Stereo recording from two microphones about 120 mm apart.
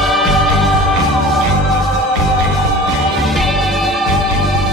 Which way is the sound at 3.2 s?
Centre (ahead or behind).